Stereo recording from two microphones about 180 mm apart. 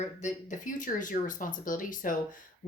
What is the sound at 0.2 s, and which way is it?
A woman's voice, 45° left (ahead or behind).